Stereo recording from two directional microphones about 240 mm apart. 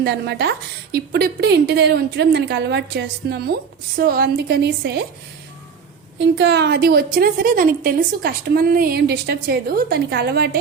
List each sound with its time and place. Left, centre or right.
0.0 s a woman's voice: right
6.1 s a woman's voice: right